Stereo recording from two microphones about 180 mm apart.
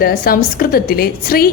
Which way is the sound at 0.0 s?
55° left (ahead or behind).